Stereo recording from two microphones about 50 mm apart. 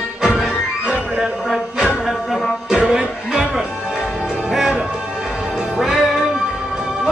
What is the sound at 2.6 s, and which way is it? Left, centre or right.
Music, centre.